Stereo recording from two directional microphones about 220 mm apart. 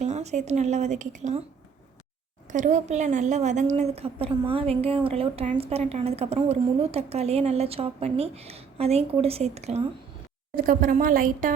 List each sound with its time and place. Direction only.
0.0 s speech: 30° right (ahead or behind)
2.5 s a woman's voice: 35° right (ahead or behind)